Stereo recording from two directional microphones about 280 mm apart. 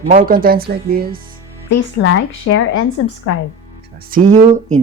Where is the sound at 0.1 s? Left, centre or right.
Right.